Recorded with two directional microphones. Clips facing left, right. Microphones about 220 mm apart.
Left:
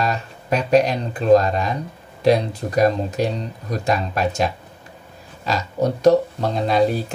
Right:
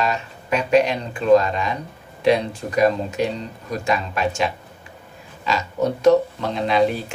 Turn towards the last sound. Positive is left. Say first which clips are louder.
# left 1 dB
turn(degrees=40)  # may be behind; listen again after turning